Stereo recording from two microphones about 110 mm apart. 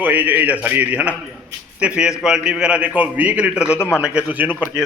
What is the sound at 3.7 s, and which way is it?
Speech, 20° left (ahead or behind).